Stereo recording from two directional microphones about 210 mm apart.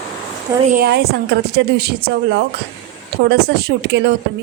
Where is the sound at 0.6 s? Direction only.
45° right (ahead or behind).